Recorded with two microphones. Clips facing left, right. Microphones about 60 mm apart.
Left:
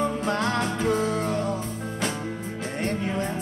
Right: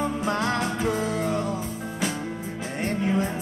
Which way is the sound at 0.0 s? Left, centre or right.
Centre.